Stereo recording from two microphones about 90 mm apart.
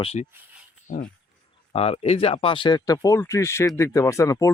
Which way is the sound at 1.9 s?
90° left.